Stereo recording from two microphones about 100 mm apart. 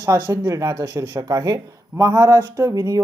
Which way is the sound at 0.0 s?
35° right (ahead or behind).